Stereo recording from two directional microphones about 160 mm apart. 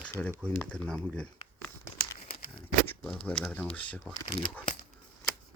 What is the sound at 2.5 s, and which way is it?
Speech, 5° left (ahead or behind).